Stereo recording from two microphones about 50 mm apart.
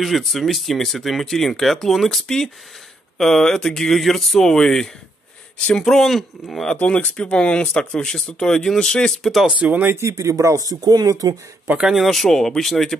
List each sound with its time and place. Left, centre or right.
0.0 s speech: centre
6.8 s speech: left; by 9.5 s centre
9.6 s speech: right
9.9 s speech: right
11.8 s speech: centre